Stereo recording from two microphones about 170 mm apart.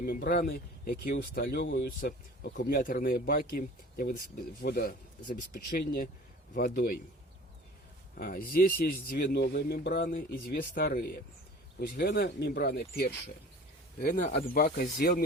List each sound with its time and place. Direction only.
0.0 s speech: 60° left (ahead or behind); by 1.7 s 80° left
1.7 s speech: 55° left (ahead or behind)
8.2 s speech: 60° left (ahead or behind)
11.8 s speech: 80° left
14.0 s speech: 45° left (ahead or behind)
14.4 s speech: 60° left (ahead or behind)